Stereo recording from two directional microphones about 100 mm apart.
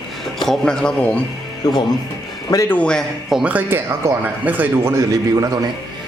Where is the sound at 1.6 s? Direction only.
45° left (ahead or behind).